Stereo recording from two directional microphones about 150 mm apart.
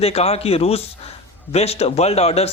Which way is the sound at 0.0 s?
40° left (ahead or behind).